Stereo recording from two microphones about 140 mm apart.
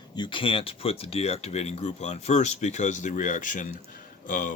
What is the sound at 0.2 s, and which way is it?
Speech, 35° left (ahead or behind).